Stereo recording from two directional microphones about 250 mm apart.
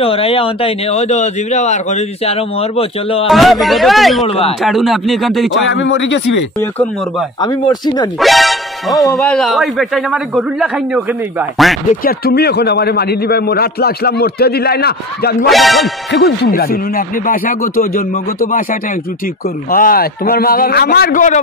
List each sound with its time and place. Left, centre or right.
0.0 s speech: left
3.3 s speech: centre
5.7 s speech: left
6.6 s speech: centre
7.4 s speech: centre
8.2 s speech: centre
12.0 s a man's voice: left
15.4 s speech: centre
16.1 s a man's voice: left